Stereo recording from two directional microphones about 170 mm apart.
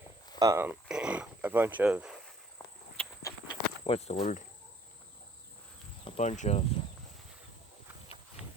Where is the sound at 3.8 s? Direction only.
35° left (ahead or behind).